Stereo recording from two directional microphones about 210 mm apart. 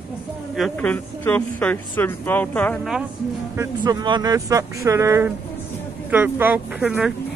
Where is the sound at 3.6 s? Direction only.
20° right (ahead or behind).